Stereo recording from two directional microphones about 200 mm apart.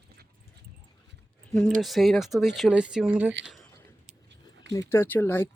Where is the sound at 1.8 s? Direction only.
Centre (ahead or behind).